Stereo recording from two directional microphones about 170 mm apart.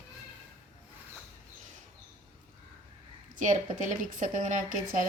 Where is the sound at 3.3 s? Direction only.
50° right (ahead or behind).